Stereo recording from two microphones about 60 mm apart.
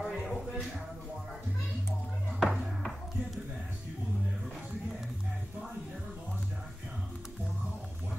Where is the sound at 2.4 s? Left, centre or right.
Centre.